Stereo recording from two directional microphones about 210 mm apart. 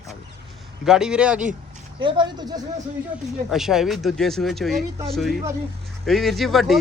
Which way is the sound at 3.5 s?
Centre (ahead or behind).